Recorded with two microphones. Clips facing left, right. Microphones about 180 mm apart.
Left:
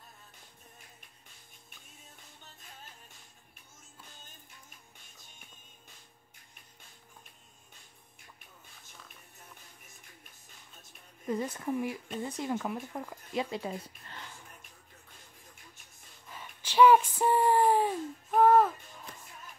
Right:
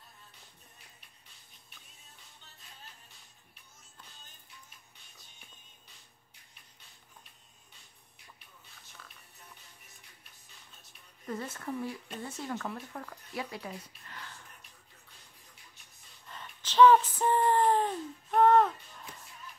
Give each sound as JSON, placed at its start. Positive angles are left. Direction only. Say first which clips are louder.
{"t": 2.6, "sound": "music", "louder": "left 1 dB", "side_deg": 50}
{"t": 11.2, "sound": "speech", "louder": "left 5 dB", "side_deg": 15}
{"t": 16.3, "sound": "a sound", "louder": "even", "side_deg": 10}